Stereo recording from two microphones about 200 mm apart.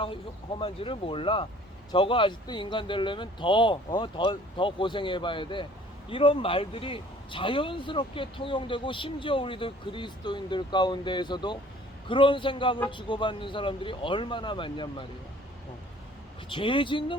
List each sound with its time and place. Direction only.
0.6 s speech: 25° left (ahead or behind)
16.5 s speech: 25° left (ahead or behind)